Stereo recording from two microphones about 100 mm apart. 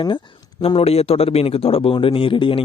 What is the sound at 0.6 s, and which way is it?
A man's voice, 80° left.